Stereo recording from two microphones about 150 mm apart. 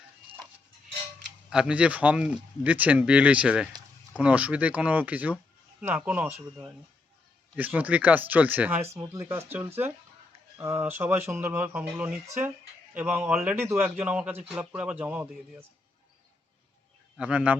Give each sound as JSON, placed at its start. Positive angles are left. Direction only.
{"t": 1.5, "sound": "speech", "side_deg": -5}
{"t": 7.5, "sound": "speech", "side_deg": -10}
{"t": 17.2, "sound": "speech", "side_deg": -10}